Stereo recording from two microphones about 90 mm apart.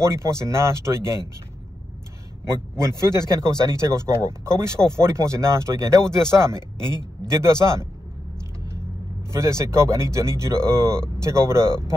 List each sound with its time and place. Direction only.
0.0 s speech: 35° right (ahead or behind)
2.8 s speech: 30° right (ahead or behind)
9.3 s speech: 35° right (ahead or behind)